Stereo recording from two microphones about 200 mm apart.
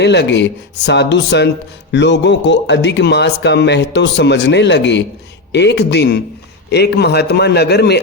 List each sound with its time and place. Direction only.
0.0 s a man's voice: 60° left (ahead or behind)